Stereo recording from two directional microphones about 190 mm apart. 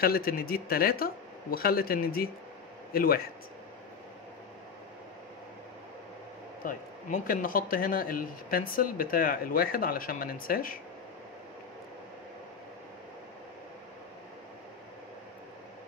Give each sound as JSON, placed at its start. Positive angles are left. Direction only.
{"t": 0.0, "sound": "a man's voice", "side_deg": 50}
{"t": 6.6, "sound": "speech", "side_deg": 45}